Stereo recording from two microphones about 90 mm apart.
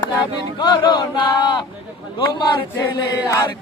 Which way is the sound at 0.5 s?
55° left (ahead or behind).